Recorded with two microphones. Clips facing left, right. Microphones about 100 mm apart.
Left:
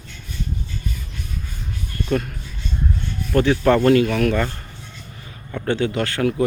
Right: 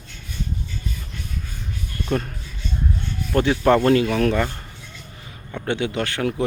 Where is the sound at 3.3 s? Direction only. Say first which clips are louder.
Left 1 dB; 20° right (ahead or behind).